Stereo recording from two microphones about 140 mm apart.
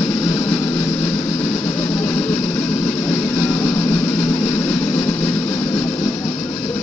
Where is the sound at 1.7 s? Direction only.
20° left (ahead or behind).